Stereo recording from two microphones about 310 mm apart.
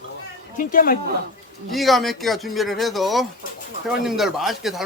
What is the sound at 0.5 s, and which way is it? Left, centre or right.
Speech, left.